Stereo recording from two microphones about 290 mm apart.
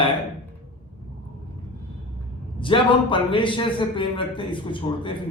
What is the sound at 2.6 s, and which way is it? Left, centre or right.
A man's voice, centre.